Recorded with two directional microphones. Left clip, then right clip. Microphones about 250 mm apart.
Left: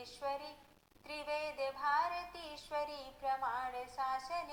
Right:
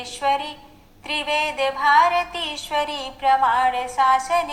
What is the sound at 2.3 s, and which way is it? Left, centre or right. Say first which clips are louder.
A woman's voice: right 18 dB; centre.